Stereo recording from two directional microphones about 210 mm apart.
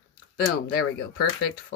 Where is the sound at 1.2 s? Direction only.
45° left (ahead or behind).